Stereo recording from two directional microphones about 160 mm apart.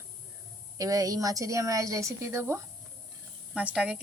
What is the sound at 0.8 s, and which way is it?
A woman's voice, 20° right (ahead or behind).